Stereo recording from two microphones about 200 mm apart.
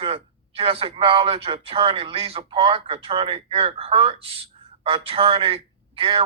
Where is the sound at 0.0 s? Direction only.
25° right (ahead or behind).